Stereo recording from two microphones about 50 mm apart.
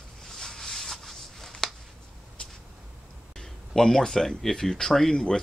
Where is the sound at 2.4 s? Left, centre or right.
Left.